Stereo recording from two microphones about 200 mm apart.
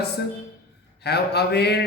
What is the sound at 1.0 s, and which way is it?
Speech, 55° left (ahead or behind).